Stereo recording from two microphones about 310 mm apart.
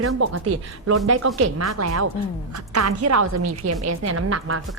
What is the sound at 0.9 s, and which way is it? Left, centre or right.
A woman's voice, right.